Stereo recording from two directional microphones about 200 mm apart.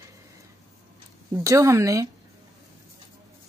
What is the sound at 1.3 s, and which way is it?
Speech, 15° right (ahead or behind).